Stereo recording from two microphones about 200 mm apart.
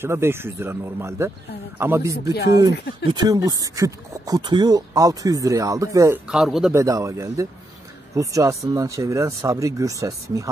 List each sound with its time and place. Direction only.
0.0 s speech: 10° right (ahead or behind)
6.2 s speech: centre (ahead or behind)
6.7 s speech: 15° right (ahead or behind)